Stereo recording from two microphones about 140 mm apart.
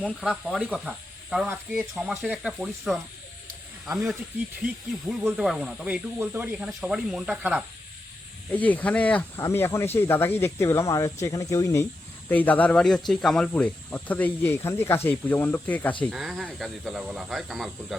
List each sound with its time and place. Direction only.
0.0 s speech: 5° right (ahead or behind)
8.5 s speech: 10° left (ahead or behind)
16.1 s speech: centre (ahead or behind)